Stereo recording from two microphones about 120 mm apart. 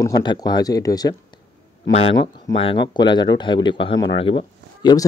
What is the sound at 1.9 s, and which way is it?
Speech, 55° left (ahead or behind).